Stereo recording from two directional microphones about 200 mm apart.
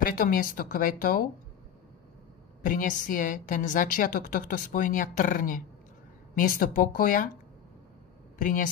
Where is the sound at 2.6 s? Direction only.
40° left (ahead or behind).